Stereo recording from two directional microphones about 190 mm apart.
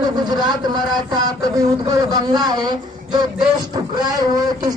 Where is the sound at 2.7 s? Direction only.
20° right (ahead or behind).